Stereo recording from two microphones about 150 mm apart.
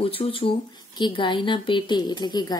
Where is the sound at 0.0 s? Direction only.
40° left (ahead or behind).